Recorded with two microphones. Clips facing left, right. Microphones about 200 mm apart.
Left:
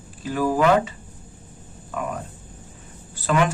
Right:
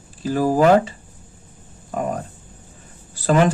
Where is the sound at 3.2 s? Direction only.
35° right (ahead or behind).